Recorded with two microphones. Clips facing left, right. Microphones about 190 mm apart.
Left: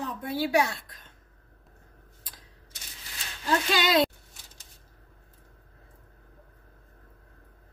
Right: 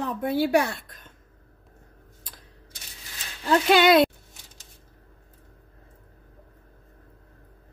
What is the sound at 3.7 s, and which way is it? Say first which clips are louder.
Speech: right 8 dB; 60° right (ahead or behind).